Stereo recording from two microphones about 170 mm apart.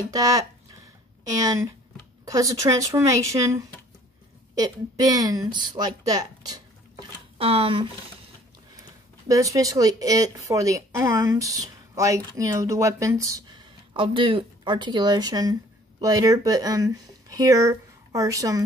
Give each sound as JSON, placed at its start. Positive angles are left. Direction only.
{"t": 0.1, "sound": "speech", "side_deg": -20}
{"t": 9.3, "sound": "speech", "side_deg": -20}